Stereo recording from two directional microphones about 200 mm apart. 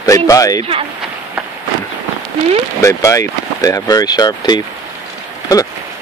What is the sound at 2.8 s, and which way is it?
Speech, 15° left (ahead or behind).